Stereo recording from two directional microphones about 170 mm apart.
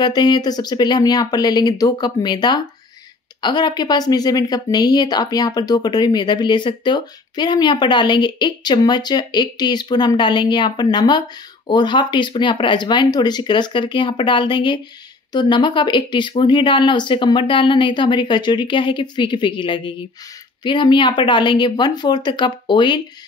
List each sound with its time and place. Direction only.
0.0 s speech: 25° left (ahead or behind)